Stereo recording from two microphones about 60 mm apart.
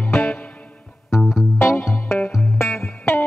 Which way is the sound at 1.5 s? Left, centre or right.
Left.